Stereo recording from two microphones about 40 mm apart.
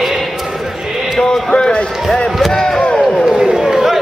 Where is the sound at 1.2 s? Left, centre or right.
Left.